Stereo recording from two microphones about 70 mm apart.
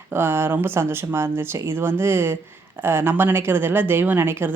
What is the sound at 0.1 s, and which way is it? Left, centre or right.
A woman's voice, right.